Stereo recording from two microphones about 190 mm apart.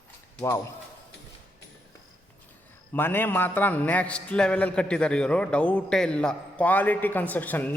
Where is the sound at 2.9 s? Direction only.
10° left (ahead or behind).